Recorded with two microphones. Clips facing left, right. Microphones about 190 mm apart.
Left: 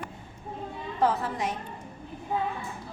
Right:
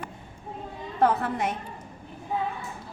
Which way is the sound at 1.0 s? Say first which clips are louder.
Right 3 dB; 60° right (ahead or behind).